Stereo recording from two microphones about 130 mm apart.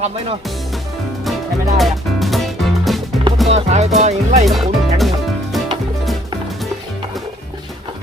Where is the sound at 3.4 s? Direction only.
55° right (ahead or behind).